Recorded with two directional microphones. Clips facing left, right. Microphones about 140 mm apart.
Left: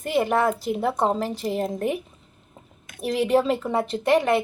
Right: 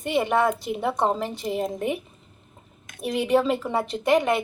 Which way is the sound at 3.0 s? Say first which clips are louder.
Left 1 dB; centre (ahead or behind).